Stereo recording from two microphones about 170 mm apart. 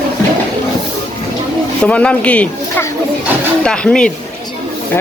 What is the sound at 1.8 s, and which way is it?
Speech, 5° left (ahead or behind).